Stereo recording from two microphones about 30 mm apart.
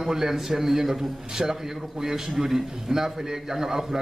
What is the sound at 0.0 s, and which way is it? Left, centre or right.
A man's voice, centre.